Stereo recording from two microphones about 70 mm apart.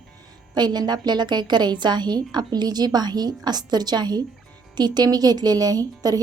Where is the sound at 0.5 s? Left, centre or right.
Right.